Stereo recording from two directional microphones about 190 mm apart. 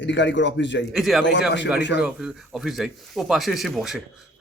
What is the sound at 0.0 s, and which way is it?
Speech, 70° left (ahead or behind).